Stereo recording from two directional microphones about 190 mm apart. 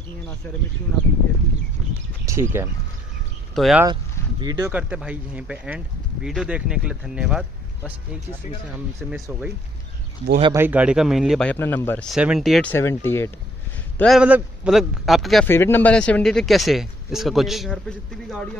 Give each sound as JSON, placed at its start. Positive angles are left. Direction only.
{"t": 2.2, "sound": "speech", "side_deg": -15}
{"t": 3.5, "sound": "speech", "side_deg": 0}
{"t": 3.8, "sound": "speech", "side_deg": -20}
{"t": 4.7, "sound": "speech", "side_deg": -5}
{"t": 9.0, "sound": "speech", "side_deg": 0}
{"t": 10.5, "sound": "speech", "side_deg": -10}
{"t": 12.1, "sound": "speech", "side_deg": -5}
{"t": 12.7, "sound": "speech", "side_deg": 15}
{"t": 13.9, "sound": "speech", "side_deg": 0}
{"t": 15.4, "sound": "speech", "side_deg": 10}